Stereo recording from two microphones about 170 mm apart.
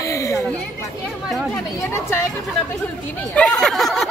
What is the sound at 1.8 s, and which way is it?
Speech, 15° left (ahead or behind).